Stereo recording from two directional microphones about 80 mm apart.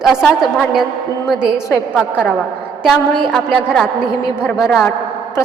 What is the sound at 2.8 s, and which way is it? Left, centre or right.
A woman's voice, centre.